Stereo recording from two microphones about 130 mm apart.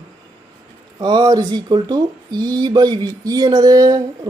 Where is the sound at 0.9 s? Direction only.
35° right (ahead or behind).